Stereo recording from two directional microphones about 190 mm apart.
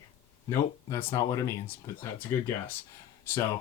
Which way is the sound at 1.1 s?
15° left (ahead or behind).